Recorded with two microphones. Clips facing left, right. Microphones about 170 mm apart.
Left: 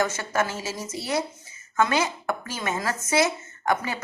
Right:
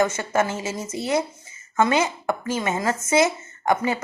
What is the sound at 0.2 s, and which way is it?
A woman's voice, 20° right (ahead or behind).